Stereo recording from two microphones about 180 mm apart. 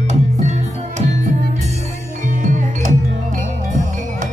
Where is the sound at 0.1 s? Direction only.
40° right (ahead or behind).